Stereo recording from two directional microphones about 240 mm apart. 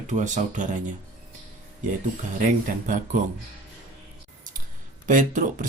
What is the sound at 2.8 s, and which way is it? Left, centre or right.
Speech, right.